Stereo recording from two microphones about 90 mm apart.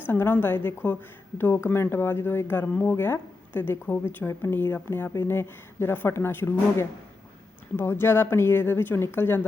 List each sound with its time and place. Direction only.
0.1 s speech: 25° left (ahead or behind)